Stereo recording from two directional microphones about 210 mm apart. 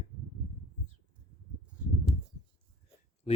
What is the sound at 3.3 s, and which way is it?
Speech, 30° left (ahead or behind).